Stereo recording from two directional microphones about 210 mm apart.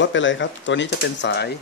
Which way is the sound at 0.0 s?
60° left (ahead or behind).